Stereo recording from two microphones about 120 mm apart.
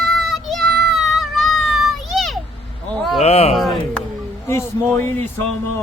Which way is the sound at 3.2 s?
60° left (ahead or behind).